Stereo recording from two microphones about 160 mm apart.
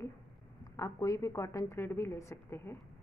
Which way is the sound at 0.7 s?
20° left (ahead or behind).